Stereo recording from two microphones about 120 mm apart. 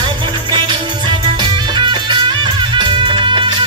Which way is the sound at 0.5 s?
40° right (ahead or behind).